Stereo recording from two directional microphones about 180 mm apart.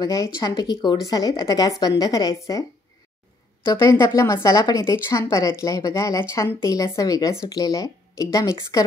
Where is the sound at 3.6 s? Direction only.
15° left (ahead or behind).